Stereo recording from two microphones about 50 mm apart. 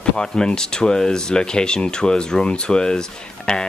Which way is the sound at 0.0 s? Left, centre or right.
Centre.